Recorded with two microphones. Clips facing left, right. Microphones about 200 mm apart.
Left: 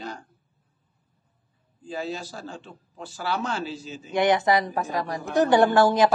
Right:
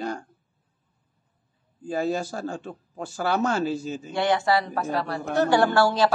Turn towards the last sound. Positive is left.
turn(degrees=20)  # may be behind; listen again after turning